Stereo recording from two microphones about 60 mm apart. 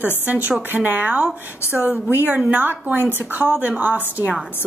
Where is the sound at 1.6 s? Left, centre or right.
Left.